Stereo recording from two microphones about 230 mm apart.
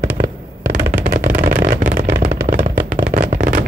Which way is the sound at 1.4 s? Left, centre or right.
Right.